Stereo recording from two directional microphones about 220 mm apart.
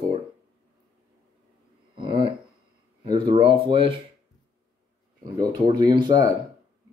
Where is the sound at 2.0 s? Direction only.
25° right (ahead or behind).